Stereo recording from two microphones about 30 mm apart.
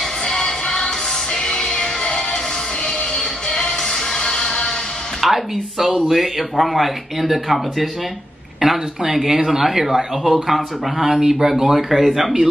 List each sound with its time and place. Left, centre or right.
0.2 s music: centre
3.4 s music: left
5.2 s speech: centre
8.5 s speech: centre